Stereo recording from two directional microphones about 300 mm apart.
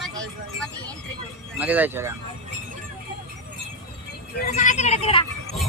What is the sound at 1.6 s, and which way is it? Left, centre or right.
Speech, centre.